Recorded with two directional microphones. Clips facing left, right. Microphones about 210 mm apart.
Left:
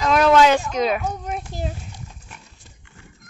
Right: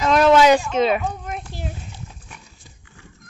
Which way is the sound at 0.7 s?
Centre (ahead or behind).